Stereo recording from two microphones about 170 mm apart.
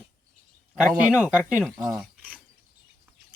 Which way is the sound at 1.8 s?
5° right (ahead or behind).